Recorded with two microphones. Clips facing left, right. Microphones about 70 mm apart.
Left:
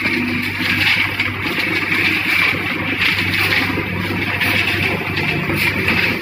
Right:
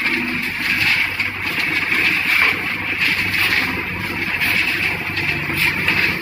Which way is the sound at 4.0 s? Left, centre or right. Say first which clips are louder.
Left 3 dB; centre.